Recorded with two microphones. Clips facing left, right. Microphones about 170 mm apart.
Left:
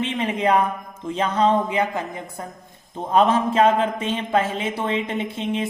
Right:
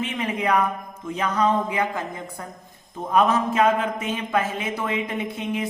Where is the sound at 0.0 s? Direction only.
25° left (ahead or behind).